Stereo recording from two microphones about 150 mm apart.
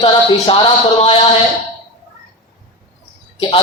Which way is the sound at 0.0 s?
35° left (ahead or behind).